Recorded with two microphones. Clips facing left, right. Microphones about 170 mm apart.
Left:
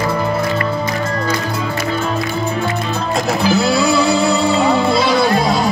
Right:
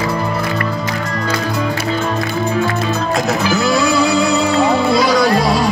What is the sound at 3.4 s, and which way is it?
Music, 30° left (ahead or behind).